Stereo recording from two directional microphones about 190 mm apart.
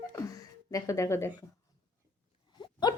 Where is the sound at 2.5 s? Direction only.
25° left (ahead or behind).